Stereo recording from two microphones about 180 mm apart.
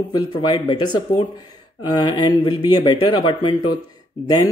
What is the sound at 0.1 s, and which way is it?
Speech, 25° left (ahead or behind).